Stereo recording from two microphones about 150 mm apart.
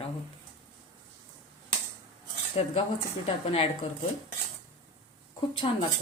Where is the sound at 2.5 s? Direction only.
40° left (ahead or behind).